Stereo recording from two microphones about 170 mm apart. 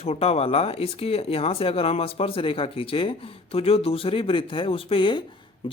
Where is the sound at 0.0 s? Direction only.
35° left (ahead or behind).